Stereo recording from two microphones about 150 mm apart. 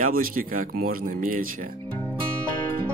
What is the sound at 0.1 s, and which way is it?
Speech, 70° right (ahead or behind).